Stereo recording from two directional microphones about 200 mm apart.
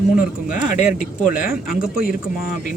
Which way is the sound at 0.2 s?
5° right (ahead or behind).